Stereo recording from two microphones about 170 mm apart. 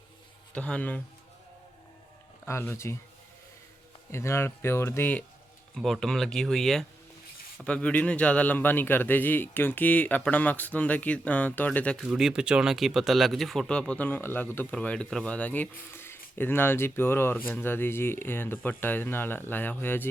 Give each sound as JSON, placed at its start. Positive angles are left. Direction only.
{"t": 0.5, "sound": "speech", "side_deg": 5}
{"t": 2.5, "sound": "speech", "side_deg": 15}
{"t": 4.1, "sound": "speech", "side_deg": 15}
{"t": 5.7, "sound": "speech", "side_deg": 0}
{"t": 12.0, "sound": "speech", "side_deg": -5}